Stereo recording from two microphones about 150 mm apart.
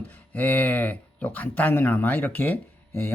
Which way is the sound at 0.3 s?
10° left (ahead or behind).